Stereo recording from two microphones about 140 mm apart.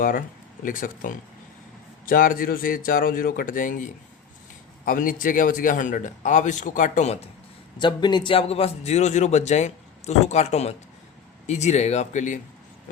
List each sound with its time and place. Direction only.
0.0 s a man's voice: 80° left
4.9 s a man's voice: 80° left; by 7.3 s 50° left (ahead or behind)
7.8 s a man's voice: 30° left (ahead or behind); by 12.4 s 60° left (ahead or behind)